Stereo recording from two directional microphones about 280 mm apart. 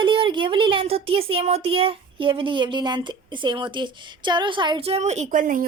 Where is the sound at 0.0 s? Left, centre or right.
Centre.